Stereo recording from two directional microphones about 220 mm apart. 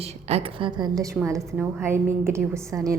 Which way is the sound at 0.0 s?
30° right (ahead or behind).